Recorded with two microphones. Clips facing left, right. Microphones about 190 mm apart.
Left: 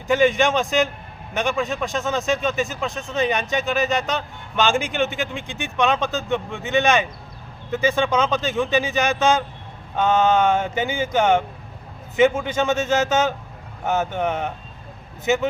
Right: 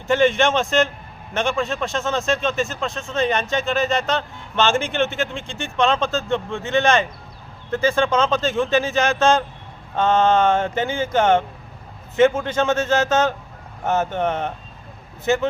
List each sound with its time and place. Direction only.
0.1 s speech: centre (ahead or behind)
4.5 s speech: 15° left (ahead or behind)
8.1 s speech: centre (ahead or behind)
8.6 s speech: 15° left (ahead or behind)
10.0 s speech: centre (ahead or behind)